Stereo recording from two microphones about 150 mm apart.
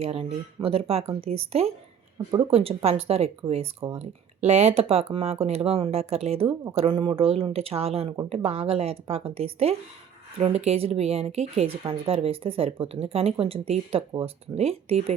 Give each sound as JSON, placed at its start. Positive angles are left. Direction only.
{"t": 0.0, "sound": "speech", "side_deg": -40}
{"t": 6.7, "sound": "speech", "side_deg": -35}